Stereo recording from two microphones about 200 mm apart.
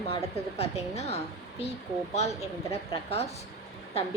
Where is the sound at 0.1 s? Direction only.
30° left (ahead or behind).